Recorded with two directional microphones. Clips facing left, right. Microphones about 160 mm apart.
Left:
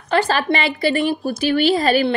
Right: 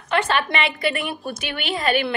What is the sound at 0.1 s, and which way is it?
A woman's voice, 35° left (ahead or behind).